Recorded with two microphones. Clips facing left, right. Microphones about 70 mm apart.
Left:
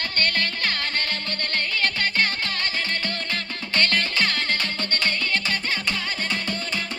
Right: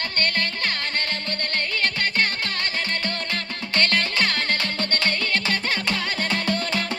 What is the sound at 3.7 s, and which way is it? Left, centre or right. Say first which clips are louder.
Music: right 1 dB; right.